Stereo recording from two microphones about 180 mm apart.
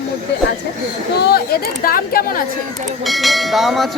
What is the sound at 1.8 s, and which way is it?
Speech, 55° left (ahead or behind).